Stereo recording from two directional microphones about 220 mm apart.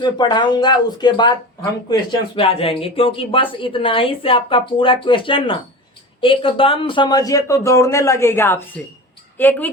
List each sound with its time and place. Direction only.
0.0 s speech: 20° left (ahead or behind)